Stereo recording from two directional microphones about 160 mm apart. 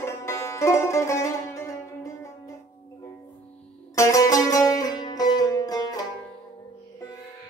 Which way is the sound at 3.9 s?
20° left (ahead or behind).